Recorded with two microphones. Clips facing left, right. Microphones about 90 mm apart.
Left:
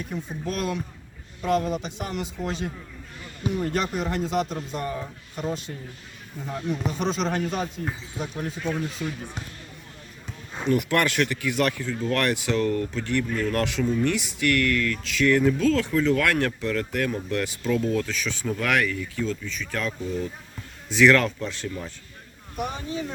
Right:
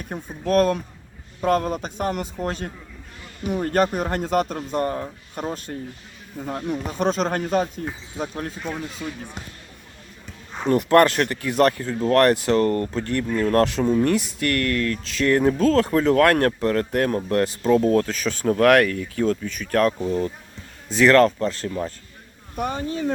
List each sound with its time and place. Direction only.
0.0 s speech: 50° right (ahead or behind)
10.7 s speech: 40° right (ahead or behind)
12.9 s speech: 40° right (ahead or behind); by 19.9 s 55° right (ahead or behind)
20.0 s speech: 65° right (ahead or behind)
20.9 s speech: 40° right (ahead or behind)
22.5 s speech: 55° right (ahead or behind)